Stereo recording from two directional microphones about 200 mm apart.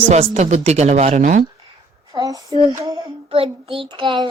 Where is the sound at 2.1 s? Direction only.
15° right (ahead or behind).